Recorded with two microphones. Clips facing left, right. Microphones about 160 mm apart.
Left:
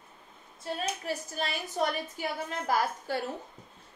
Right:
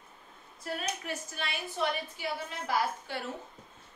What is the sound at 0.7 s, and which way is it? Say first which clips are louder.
A woman's voice: left 3 dB; 35° left (ahead or behind).